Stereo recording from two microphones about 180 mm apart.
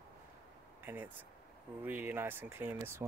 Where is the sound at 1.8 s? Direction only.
10° right (ahead or behind).